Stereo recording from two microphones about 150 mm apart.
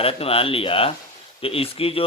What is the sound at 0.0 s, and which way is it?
Speech, 40° left (ahead or behind).